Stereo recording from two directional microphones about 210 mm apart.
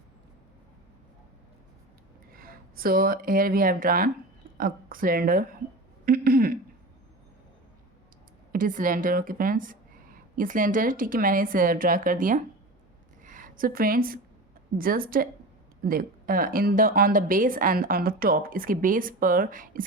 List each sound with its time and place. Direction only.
2.3 s a woman's voice: 45° right (ahead or behind)
8.5 s a woman's voice: 40° right (ahead or behind)
13.2 s a sound: 40° right (ahead or behind)
14.8 s a woman's voice: 45° right (ahead or behind)